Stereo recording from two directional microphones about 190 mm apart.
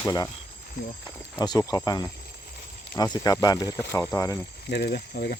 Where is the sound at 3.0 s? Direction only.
20° left (ahead or behind).